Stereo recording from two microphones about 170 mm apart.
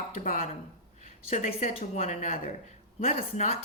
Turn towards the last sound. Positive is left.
turn(degrees=40)  # may be behind; listen again after turning